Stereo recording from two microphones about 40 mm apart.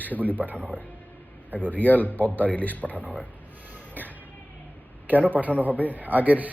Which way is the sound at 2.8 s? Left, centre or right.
Right.